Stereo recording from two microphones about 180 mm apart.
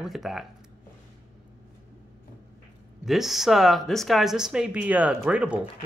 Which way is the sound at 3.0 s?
Centre (ahead or behind).